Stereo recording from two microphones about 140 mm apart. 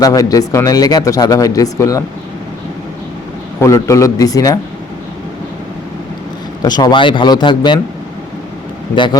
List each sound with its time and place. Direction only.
0.0 s speech: 25° left (ahead or behind)
3.6 s speech: 20° left (ahead or behind)
6.6 s speech: 30° left (ahead or behind)